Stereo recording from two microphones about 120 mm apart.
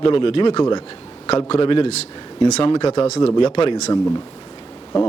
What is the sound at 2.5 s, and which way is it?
Speech, 60° left (ahead or behind).